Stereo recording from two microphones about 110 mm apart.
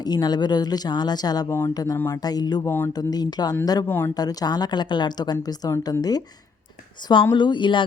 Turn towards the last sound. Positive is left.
turn(degrees=45)  # may be behind; listen again after turning